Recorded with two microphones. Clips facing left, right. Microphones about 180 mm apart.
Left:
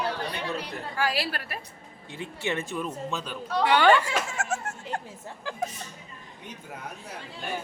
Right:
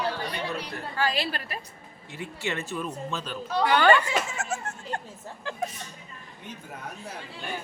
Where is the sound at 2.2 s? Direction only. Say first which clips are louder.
Left 1 dB; 15° left (ahead or behind).